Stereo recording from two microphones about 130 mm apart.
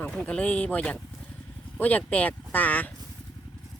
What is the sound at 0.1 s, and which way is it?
Speech, 10° left (ahead or behind).